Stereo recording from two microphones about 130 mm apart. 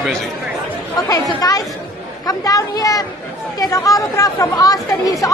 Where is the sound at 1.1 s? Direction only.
25° left (ahead or behind).